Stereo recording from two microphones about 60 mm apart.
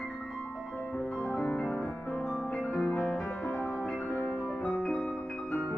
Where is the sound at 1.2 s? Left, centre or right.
Centre.